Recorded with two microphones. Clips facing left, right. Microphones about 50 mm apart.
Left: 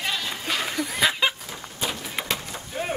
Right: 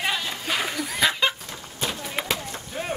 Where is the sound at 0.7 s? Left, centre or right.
Centre.